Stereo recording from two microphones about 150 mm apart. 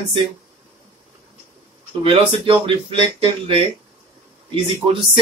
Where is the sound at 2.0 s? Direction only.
35° right (ahead or behind).